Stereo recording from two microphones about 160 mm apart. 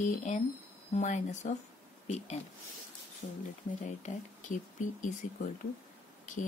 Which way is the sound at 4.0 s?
50° left (ahead or behind).